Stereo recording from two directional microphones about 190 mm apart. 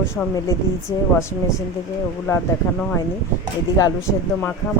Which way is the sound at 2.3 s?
15° left (ahead or behind).